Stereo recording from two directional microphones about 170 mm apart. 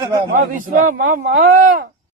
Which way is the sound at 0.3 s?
55° right (ahead or behind).